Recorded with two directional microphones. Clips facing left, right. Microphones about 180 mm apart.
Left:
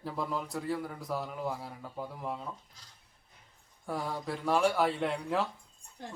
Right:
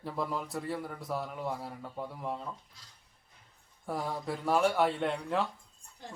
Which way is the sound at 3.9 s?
Centre (ahead or behind).